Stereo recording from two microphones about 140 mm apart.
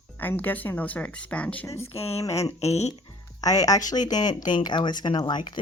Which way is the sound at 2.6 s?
50° left (ahead or behind).